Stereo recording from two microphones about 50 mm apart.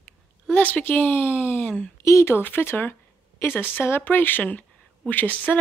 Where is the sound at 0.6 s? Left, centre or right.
Left.